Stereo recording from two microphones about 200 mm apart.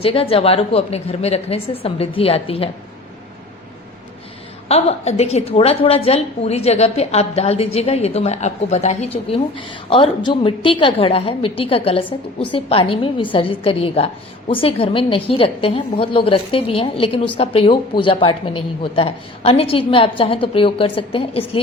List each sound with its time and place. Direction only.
0.0 s a woman's voice: 30° left (ahead or behind)
4.7 s a woman's voice: 30° left (ahead or behind)